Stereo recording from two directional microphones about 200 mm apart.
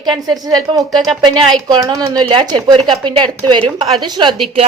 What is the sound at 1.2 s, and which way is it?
Speech, 20° right (ahead or behind).